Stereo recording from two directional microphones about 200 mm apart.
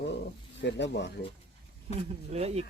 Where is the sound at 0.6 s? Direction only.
60° left (ahead or behind).